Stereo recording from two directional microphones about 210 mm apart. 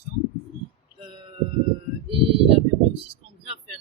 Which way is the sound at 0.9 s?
25° left (ahead or behind).